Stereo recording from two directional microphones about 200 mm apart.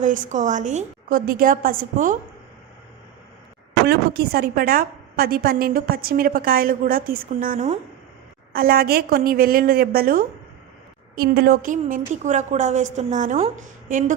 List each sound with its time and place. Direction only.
0.0 s a woman's voice: 40° right (ahead or behind)
3.8 s a woman's voice: 50° right (ahead or behind)